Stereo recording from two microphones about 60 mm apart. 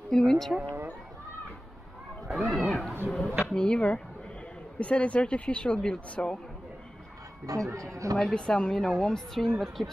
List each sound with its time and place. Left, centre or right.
0.2 s speech: centre
2.2 s a sound: centre
3.1 s speech: centre
3.4 s speech: centre
7.4 s speech: right
8.2 s speech: centre